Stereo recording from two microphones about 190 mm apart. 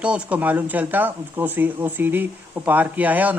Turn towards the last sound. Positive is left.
turn(degrees=-10)  # may be behind; listen again after turning